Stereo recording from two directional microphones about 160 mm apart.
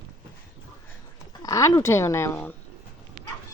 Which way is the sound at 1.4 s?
20° left (ahead or behind).